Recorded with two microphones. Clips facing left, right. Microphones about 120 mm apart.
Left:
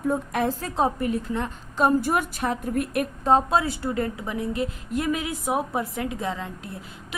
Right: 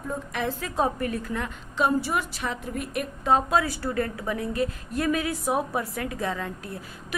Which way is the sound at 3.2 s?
30° left (ahead or behind).